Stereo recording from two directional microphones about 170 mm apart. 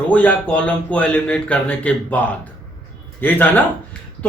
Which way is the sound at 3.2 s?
10° left (ahead or behind).